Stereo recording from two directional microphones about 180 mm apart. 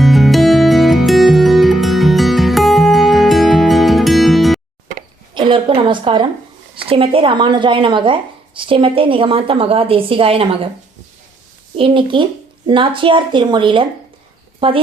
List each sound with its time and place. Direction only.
0.0 s music: centre (ahead or behind)
5.3 s a sound: 30° right (ahead or behind)
6.7 s speech: 30° right (ahead or behind)
11.8 s speech: 25° right (ahead or behind)